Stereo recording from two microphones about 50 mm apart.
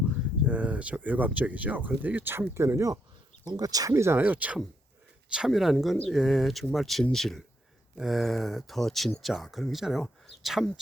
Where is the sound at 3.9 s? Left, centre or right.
Right.